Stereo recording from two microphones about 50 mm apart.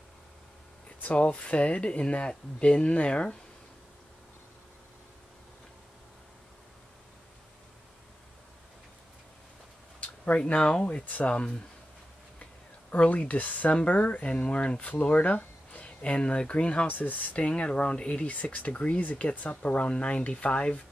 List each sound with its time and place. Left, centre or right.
1.0 s speech: left
9.9 s a sound: left
10.5 s speech: left
12.9 s speech: left
16.9 s speech: left